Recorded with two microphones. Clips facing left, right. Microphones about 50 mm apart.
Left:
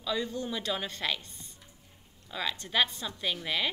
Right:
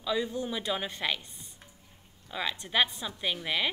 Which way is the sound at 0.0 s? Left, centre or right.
Centre.